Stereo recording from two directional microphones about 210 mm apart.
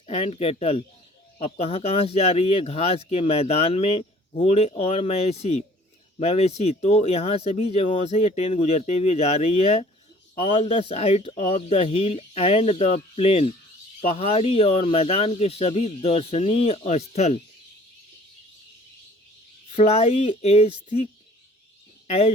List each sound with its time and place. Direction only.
0.1 s speech: 30° left (ahead or behind)
19.7 s speech: 30° left (ahead or behind)
22.0 s a sound: 30° left (ahead or behind)